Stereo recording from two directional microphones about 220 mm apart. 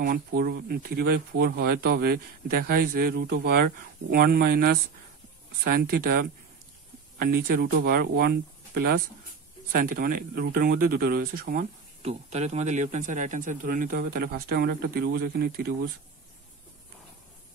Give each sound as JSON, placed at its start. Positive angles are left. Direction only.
{"t": 0.0, "sound": "a man's voice", "side_deg": -40}
{"t": 12.0, "sound": "a man's voice", "side_deg": -30}